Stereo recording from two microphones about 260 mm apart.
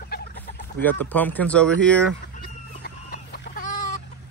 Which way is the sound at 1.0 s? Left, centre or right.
Centre.